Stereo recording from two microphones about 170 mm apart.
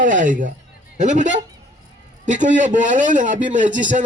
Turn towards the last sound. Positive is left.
turn(degrees=-50)  # may be behind; listen again after turning